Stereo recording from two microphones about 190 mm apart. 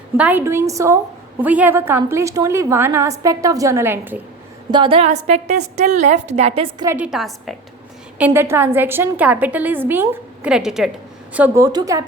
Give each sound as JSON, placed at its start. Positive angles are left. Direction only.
{"t": 0.2, "sound": "a woman's voice", "side_deg": -10}
{"t": 4.7, "sound": "a woman's voice", "side_deg": -25}
{"t": 6.8, "sound": "a woman's voice", "side_deg": -10}
{"t": 8.2, "sound": "a woman's voice", "side_deg": -10}